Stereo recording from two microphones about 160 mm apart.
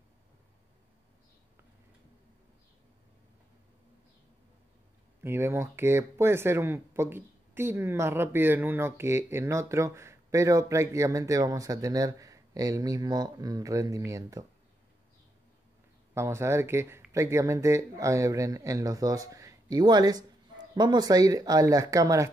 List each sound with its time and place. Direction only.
5.2 s speech: 15° right (ahead or behind)
16.2 s speech: 15° right (ahead or behind)